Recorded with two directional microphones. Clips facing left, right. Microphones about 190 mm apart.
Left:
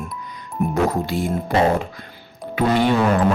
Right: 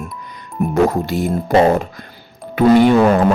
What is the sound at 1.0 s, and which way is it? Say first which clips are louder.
Speech: right 3 dB; 45° right (ahead or behind).